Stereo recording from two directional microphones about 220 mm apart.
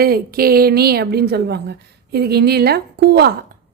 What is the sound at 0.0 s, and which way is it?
A woman's voice, 40° right (ahead or behind).